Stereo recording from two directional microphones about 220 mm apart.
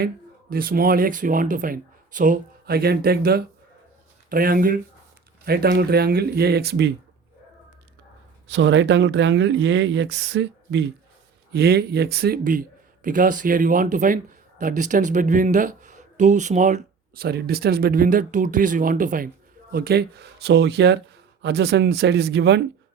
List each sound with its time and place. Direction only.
0.5 s speech: 40° right (ahead or behind)
8.4 s speech: 55° right (ahead or behind)